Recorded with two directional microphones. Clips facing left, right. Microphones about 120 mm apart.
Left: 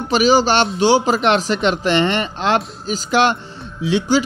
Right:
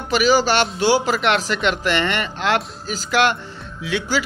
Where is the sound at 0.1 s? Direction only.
20° left (ahead or behind).